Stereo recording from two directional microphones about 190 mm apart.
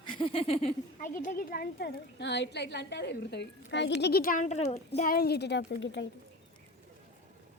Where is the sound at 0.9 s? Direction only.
45° left (ahead or behind).